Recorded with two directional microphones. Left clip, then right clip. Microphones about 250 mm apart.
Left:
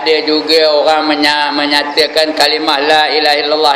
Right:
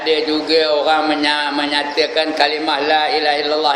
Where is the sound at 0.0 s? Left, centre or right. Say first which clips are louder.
Left 5 dB; centre.